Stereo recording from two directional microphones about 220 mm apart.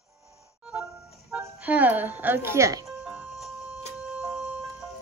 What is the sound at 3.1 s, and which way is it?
Music, centre (ahead or behind).